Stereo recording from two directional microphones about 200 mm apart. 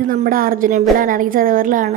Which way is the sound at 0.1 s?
45° right (ahead or behind).